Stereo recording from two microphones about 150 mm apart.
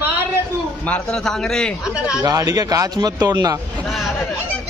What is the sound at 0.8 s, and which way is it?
Speech, 10° left (ahead or behind).